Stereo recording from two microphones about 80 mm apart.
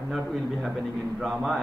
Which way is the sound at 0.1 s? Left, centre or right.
Centre.